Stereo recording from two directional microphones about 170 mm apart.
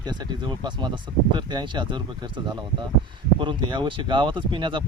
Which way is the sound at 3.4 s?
30° right (ahead or behind).